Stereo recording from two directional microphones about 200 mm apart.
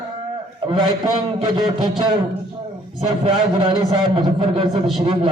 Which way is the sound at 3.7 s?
20° right (ahead or behind).